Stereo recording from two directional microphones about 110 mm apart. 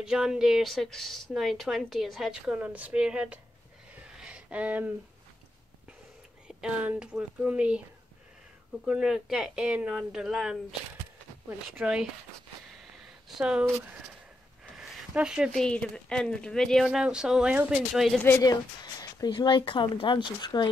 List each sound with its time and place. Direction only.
0.0 s speech: 5° right (ahead or behind)
3.9 s a sound: 10° right (ahead or behind)
6.4 s speech: 10° right (ahead or behind)
8.8 s speech: 5° right (ahead or behind)
13.3 s speech: 10° right (ahead or behind)
15.1 s speech: 5° right (ahead or behind)
15.6 s speech: 10° left (ahead or behind)
16.8 s speech: 10° right (ahead or behind)
18.4 s speech: 35° left (ahead or behind)